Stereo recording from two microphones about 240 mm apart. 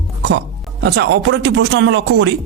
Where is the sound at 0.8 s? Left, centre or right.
Right.